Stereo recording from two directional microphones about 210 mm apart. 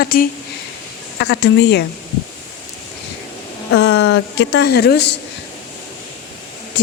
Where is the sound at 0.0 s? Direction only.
45° left (ahead or behind).